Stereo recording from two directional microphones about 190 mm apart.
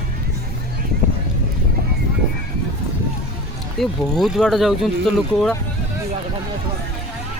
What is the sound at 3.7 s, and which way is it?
Speech, centre (ahead or behind).